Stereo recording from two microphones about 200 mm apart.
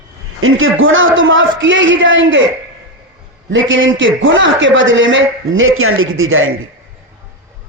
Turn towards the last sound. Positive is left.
turn(degrees=-90)